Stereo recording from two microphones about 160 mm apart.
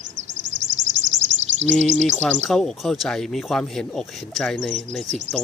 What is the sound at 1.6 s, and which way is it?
Bird, 45° right (ahead or behind).